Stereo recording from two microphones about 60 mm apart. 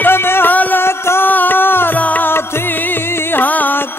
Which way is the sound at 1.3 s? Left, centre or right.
Left.